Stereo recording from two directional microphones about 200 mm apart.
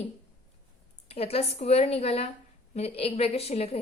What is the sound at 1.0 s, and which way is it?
A woman's voice, 30° left (ahead or behind).